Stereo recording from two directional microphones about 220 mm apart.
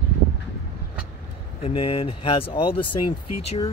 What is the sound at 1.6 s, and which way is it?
Speech, 25° left (ahead or behind).